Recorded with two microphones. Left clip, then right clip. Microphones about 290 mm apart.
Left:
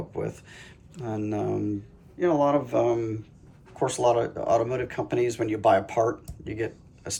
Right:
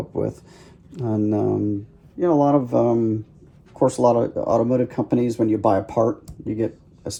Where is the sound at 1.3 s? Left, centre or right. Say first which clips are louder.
Right 5 dB; right.